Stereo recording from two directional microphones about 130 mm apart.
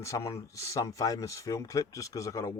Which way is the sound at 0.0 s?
25° left (ahead or behind).